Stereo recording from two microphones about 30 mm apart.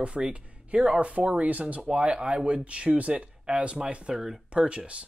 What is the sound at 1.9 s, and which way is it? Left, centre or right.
Speech, right.